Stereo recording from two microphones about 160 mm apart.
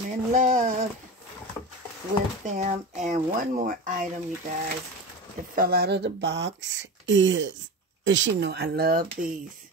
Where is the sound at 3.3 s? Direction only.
60° right (ahead or behind).